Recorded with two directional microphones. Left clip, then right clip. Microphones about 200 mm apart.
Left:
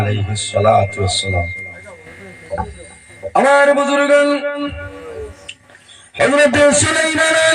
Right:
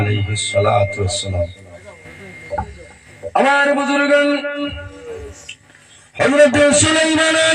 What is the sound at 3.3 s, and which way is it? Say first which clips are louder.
Speech: left 3 dB; 25° left (ahead or behind).